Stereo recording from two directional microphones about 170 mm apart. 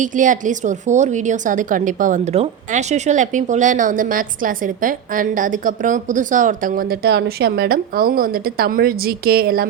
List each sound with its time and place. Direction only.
0.0 s a woman's voice: 50° right (ahead or behind)